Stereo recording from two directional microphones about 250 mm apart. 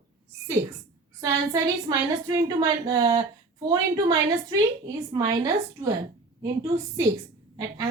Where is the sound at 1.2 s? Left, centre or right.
Centre.